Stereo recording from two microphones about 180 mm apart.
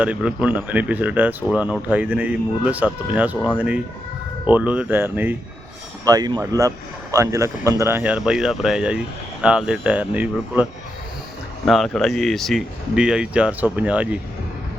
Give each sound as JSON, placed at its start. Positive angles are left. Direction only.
{"t": 0.0, "sound": "speech", "side_deg": -5}
{"t": 4.5, "sound": "speech", "side_deg": -5}
{"t": 6.1, "sound": "speech", "side_deg": -20}